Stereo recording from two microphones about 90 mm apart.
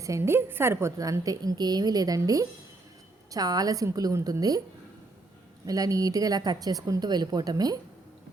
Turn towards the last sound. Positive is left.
turn(degrees=-45)  # may be behind; listen again after turning